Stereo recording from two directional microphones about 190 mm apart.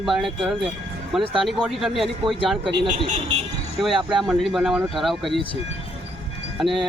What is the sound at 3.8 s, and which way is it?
Speech, centre (ahead or behind).